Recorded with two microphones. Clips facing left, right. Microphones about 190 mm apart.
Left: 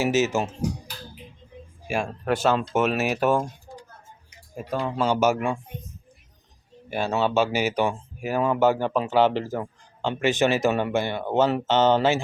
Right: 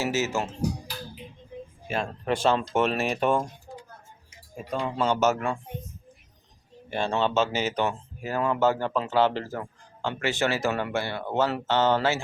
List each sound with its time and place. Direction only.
0.0 s speech: 15° left (ahead or behind)
1.9 s speech: 5° left (ahead or behind)
4.5 s speech: 5° left (ahead or behind)
6.9 s speech: 5° left (ahead or behind)